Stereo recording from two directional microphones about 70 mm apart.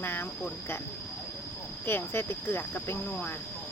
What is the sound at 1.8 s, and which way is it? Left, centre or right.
Speech, left.